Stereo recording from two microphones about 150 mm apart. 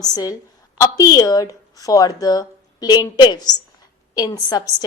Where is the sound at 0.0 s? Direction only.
25° left (ahead or behind).